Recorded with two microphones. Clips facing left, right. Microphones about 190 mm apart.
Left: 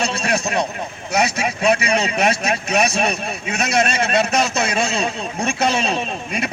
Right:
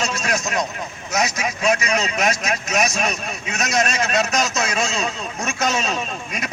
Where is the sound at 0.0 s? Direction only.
30° left (ahead or behind).